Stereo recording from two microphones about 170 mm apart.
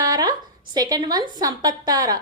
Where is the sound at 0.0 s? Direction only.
20° right (ahead or behind).